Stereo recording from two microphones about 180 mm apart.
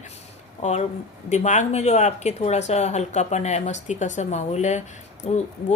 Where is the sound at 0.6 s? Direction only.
40° left (ahead or behind).